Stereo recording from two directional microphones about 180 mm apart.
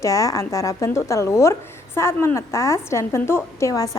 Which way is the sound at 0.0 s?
20° left (ahead or behind).